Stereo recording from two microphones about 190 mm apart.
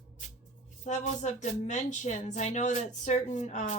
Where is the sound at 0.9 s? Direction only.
40° left (ahead or behind).